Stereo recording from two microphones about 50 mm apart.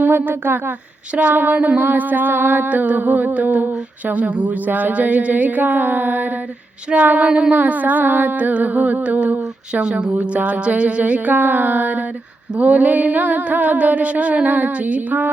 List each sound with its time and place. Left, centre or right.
0.0 s speech: right
1.1 s music: right
1.4 s humming: right
2.6 s humming: right
6.9 s music: right
7.5 s humming: right
12.5 s music: right